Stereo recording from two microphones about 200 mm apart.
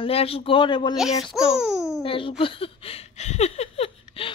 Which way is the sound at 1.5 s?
5° right (ahead or behind).